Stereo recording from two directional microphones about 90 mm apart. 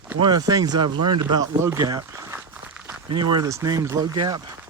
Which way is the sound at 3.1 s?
55° right (ahead or behind).